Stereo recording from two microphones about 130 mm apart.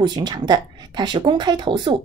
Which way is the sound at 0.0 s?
35° right (ahead or behind).